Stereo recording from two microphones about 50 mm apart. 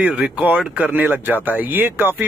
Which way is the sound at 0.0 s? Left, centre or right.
Right.